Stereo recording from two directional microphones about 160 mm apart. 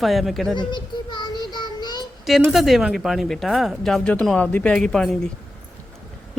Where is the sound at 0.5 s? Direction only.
30° left (ahead or behind).